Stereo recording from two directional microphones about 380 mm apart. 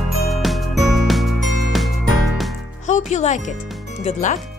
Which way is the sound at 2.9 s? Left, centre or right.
Centre.